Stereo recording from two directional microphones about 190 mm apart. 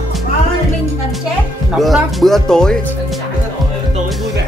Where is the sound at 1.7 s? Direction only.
Centre (ahead or behind).